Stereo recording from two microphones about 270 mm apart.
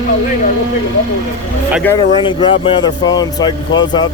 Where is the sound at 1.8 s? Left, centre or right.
Centre.